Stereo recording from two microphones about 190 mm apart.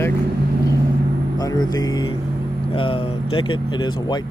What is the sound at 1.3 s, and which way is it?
Speech, 20° left (ahead or behind).